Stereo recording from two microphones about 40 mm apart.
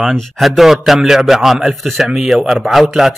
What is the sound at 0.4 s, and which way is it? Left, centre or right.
A man's voice, centre.